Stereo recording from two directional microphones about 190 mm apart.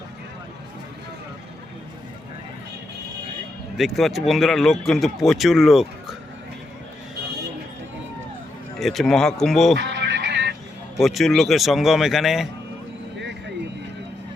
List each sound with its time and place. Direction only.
3.8 s speech: centre (ahead or behind)
8.8 s speech: centre (ahead or behind)
9.7 s music: 65° right (ahead or behind)
10.9 s speech: centre (ahead or behind)